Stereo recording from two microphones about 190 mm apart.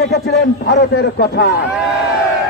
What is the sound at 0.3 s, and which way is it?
A man's voice, 60° left (ahead or behind).